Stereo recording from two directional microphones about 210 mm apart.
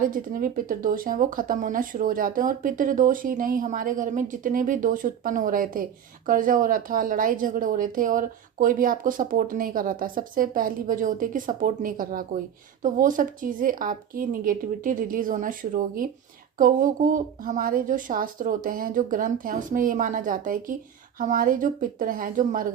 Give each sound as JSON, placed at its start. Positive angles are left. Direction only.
{"t": 0.0, "sound": "a woman's voice", "side_deg": -40}